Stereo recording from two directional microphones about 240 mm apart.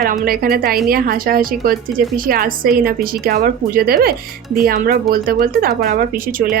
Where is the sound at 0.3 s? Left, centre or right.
Right.